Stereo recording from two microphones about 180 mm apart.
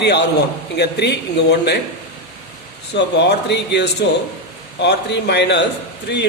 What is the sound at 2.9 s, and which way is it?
A man's voice, 75° left (ahead or behind).